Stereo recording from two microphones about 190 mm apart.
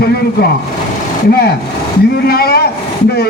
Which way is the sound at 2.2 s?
55° left (ahead or behind).